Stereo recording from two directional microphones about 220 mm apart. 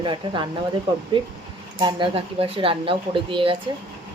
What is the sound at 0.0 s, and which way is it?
Speech, 20° right (ahead or behind).